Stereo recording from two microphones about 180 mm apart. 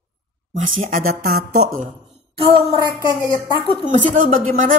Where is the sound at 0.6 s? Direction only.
45° right (ahead or behind).